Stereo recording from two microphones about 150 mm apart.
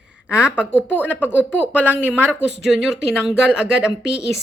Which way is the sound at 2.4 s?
5° right (ahead or behind).